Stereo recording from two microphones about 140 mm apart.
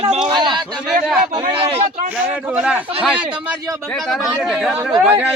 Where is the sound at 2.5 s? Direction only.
5° right (ahead or behind).